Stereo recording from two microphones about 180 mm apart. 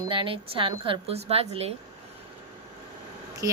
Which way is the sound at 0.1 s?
30° right (ahead or behind).